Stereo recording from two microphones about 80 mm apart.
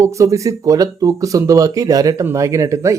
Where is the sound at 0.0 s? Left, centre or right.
Right.